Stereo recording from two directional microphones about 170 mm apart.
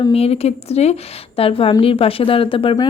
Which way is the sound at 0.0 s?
35° left (ahead or behind).